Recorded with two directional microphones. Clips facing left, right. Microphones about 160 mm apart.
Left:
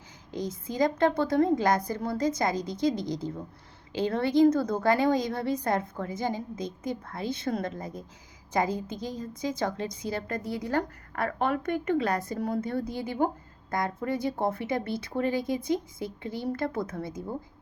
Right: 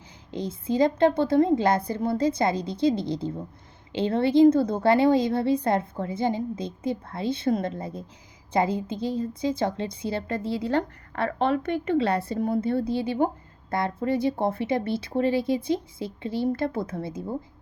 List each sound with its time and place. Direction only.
0.7 s speech: 25° right (ahead or behind)